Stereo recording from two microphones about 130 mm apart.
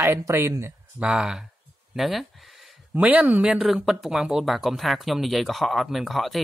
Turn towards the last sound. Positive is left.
turn(degrees=0)  # may be behind; listen again after turning